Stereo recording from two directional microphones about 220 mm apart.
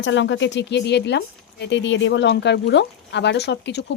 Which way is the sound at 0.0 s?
55° left (ahead or behind).